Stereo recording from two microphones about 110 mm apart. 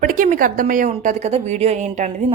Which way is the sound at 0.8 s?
90° right.